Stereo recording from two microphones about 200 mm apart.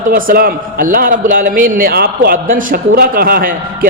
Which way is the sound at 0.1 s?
45° right (ahead or behind).